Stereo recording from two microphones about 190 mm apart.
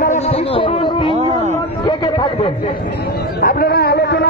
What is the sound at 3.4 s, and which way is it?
Speech, 55° left (ahead or behind).